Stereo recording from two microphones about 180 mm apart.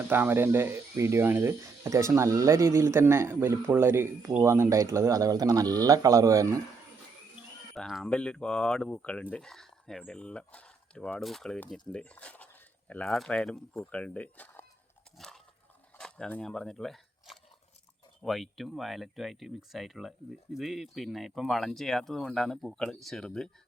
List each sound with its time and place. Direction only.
0.1 s speech: 10° right (ahead or behind)
7.8 s speech: centre (ahead or behind)
15.2 s a sound: centre (ahead or behind)
16.0 s speech: 5° left (ahead or behind)